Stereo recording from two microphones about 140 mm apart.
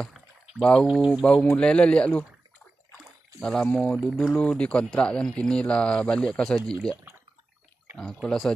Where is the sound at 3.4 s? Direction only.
5° left (ahead or behind).